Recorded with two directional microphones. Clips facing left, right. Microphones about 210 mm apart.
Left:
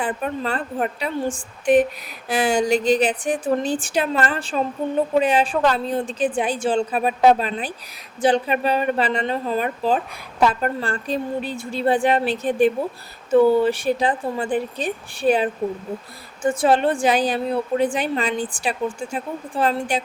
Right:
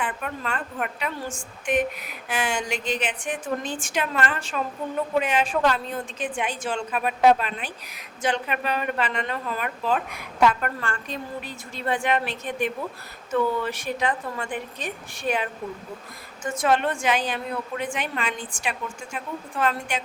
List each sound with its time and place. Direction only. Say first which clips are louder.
0.0 s a woman's voice: left 6 dB; 35° left (ahead or behind)